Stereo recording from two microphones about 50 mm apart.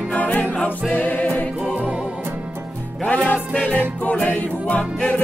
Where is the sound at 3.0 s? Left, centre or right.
Left.